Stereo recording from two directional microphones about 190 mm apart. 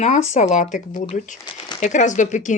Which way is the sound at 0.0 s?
35° left (ahead or behind).